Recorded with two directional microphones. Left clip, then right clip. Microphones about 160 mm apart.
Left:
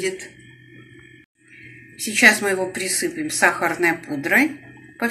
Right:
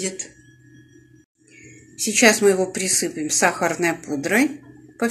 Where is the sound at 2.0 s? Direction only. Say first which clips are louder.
Even; 70° right (ahead or behind).